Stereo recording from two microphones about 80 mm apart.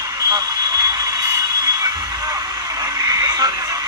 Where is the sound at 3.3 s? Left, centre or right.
Right.